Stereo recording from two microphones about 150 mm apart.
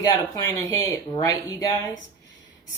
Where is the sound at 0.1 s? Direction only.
20° left (ahead or behind).